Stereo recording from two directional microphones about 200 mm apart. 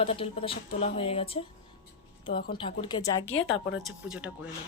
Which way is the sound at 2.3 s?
50° left (ahead or behind).